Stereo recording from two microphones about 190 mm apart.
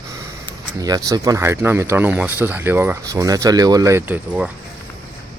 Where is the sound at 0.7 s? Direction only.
20° right (ahead or behind).